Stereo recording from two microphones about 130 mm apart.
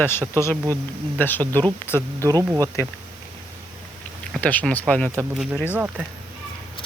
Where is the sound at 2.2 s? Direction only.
25° right (ahead or behind).